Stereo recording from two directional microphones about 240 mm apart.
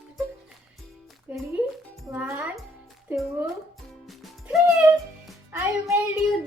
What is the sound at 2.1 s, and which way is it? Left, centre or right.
Child singing, centre.